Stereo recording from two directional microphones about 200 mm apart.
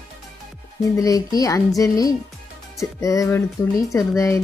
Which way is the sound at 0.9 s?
15° left (ahead or behind).